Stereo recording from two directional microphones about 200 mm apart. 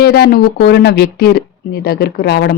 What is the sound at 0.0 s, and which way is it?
Speech, 50° left (ahead or behind).